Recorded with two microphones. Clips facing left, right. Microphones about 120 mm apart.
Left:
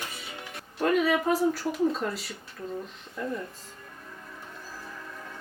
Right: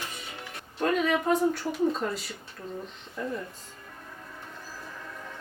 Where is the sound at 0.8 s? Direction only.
5° left (ahead or behind).